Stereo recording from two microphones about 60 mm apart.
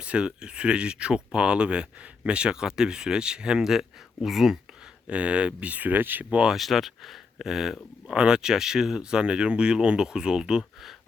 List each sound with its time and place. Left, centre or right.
0.0 s speech: centre
5.0 s speech: centre
6.5 s speech: centre